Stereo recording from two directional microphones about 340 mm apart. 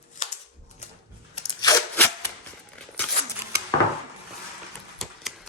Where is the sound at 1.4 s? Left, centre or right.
Centre.